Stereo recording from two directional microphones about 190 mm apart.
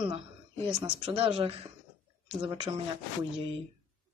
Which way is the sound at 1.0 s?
30° right (ahead or behind).